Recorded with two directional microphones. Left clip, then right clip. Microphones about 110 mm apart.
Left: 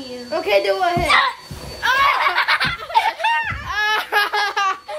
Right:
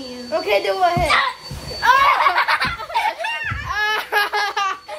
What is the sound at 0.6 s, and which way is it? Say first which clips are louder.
Speech: even; 15° right (ahead or behind).